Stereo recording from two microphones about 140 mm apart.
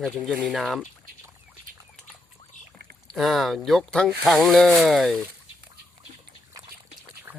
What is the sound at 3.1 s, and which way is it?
Speech, centre (ahead or behind).